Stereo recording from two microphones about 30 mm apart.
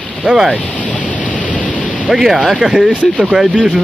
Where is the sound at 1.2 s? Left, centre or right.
Left.